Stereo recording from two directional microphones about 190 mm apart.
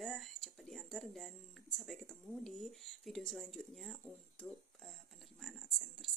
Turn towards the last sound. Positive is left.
turn(degrees=0)  # may be behind; listen again after turning